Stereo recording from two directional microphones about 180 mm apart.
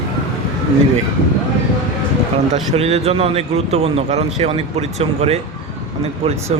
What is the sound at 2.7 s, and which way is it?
Speech, 35° right (ahead or behind).